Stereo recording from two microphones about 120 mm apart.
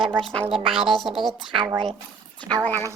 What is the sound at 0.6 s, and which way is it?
Speech, 45° right (ahead or behind).